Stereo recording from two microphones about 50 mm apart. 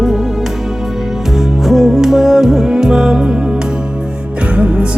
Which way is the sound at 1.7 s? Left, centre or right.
Centre.